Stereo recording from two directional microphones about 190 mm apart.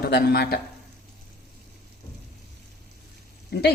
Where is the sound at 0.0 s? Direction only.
55° left (ahead or behind).